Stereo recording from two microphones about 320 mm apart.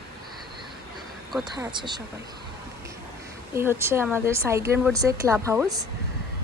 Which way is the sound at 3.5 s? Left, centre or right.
Centre.